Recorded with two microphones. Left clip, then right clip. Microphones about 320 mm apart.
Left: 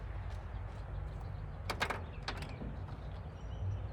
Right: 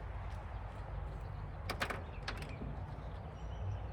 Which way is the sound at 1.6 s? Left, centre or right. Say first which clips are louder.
Left 3 dB; centre.